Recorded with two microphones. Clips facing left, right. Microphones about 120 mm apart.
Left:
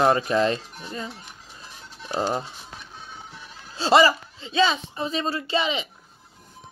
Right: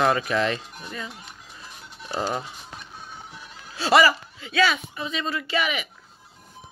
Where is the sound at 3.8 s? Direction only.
25° left (ahead or behind).